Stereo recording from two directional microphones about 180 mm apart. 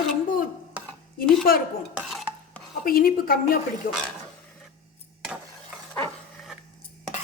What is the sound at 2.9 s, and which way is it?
Speech, 55° left (ahead or behind).